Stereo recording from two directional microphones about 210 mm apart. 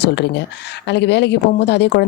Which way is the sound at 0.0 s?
55° left (ahead or behind).